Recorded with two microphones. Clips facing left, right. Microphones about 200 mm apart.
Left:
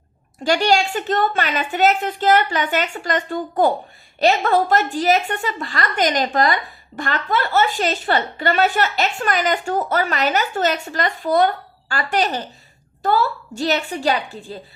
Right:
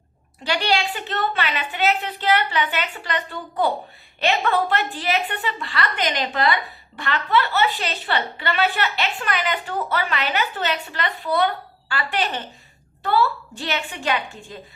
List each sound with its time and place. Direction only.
0.4 s a woman's voice: 45° left (ahead or behind)